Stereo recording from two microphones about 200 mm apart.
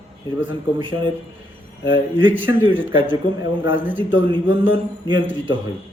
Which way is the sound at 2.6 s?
25° right (ahead or behind).